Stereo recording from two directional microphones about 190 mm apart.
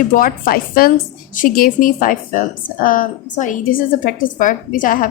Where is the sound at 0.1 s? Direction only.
50° left (ahead or behind).